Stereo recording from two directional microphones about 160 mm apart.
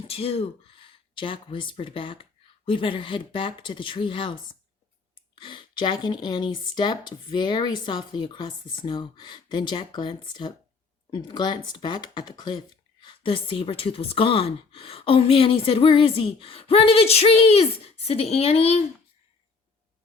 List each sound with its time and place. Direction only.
0.1 s speech: 35° left (ahead or behind)